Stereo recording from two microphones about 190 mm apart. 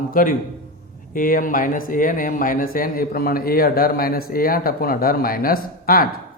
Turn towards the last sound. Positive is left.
turn(degrees=50)  # may be behind; listen again after turning